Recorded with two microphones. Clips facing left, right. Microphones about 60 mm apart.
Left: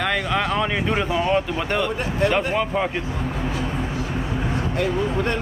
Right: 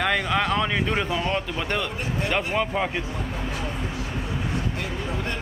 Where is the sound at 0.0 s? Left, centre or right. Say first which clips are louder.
Left 1 dB; centre.